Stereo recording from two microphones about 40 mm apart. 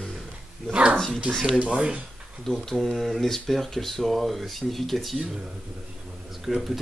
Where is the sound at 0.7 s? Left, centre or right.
Right.